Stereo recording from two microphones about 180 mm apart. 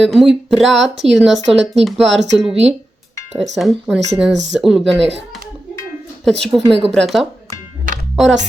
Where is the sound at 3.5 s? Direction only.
Centre (ahead or behind).